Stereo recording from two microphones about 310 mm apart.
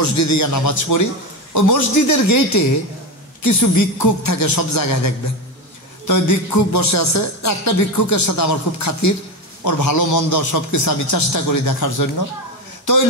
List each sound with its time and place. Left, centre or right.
0.0 s a man's voice: left